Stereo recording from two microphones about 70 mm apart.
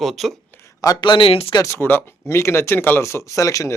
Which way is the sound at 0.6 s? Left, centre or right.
Left.